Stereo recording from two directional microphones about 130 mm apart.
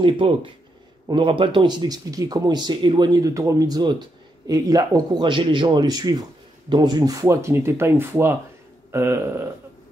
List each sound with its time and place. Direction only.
0.0 s speech: 40° right (ahead or behind)
5.2 s speech: 40° right (ahead or behind); by 9.5 s 20° right (ahead or behind)